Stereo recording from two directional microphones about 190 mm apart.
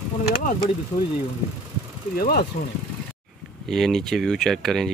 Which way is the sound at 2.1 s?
50° left (ahead or behind).